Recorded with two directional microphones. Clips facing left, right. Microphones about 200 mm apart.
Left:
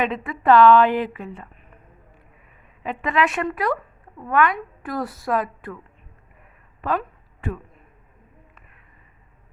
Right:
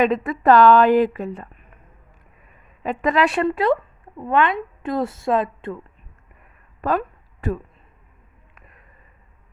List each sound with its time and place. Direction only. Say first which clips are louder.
0.0 s a woman's voice: right 5 dB; 40° right (ahead or behind)
2.8 s a woman's voice: right 3 dB; 40° right (ahead or behind); by 5.8 s 25° right (ahead or behind)
6.8 s a woman's voice: right 3 dB; 45° right (ahead or behind)